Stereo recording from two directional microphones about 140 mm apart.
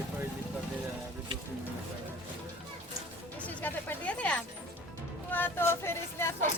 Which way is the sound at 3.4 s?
10° left (ahead or behind).